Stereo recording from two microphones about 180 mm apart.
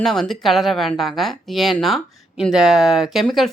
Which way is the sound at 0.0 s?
Centre (ahead or behind).